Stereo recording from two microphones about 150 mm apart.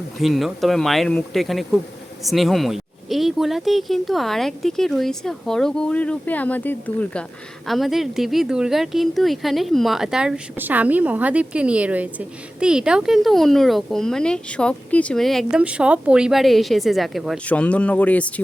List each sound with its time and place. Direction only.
0.2 s speech: centre (ahead or behind)